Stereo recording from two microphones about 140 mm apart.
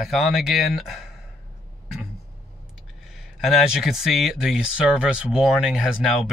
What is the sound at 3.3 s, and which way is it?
Speech, centre (ahead or behind).